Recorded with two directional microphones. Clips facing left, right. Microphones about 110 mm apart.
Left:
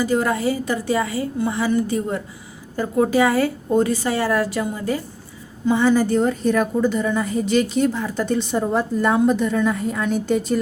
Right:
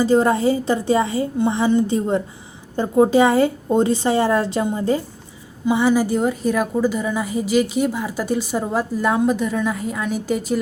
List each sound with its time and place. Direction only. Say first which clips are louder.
0.0 s a woman's voice: right 4 dB; 30° right (ahead or behind)
5.6 s a woman's voice: even; 15° right (ahead or behind)